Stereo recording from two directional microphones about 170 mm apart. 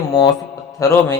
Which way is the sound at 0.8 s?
20° left (ahead or behind).